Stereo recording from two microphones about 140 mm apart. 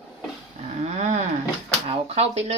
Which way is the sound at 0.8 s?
55° right (ahead or behind).